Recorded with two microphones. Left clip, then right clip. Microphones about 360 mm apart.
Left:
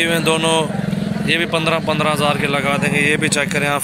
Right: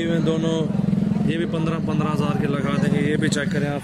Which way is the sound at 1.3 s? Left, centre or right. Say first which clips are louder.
Left 13 dB; centre.